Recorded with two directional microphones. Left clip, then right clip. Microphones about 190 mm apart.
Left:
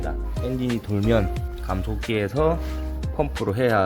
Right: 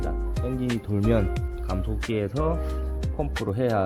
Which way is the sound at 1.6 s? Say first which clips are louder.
Left 4 dB; 10° left (ahead or behind).